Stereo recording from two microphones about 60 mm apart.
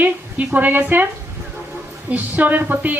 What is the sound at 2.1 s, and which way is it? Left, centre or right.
Speech, right.